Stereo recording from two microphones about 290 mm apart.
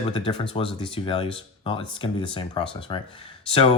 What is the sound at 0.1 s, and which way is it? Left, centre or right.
Speech, centre.